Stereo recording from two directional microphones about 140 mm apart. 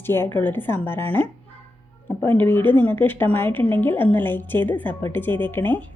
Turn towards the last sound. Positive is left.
turn(degrees=15)  # may be behind; listen again after turning